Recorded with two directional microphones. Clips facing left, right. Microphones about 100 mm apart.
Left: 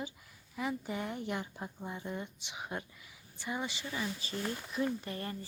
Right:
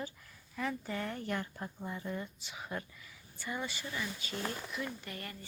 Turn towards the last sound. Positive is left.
turn(degrees=30)  # may be behind; listen again after turning